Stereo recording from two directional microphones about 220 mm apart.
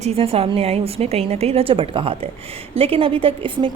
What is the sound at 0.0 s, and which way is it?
A woman's voice, 25° right (ahead or behind).